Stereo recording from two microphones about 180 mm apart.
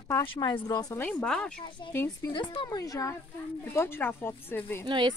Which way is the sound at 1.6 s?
25° left (ahead or behind).